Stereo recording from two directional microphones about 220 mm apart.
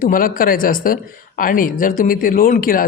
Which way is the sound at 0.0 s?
40° left (ahead or behind).